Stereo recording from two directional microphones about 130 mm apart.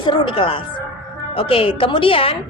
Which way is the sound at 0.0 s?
40° left (ahead or behind).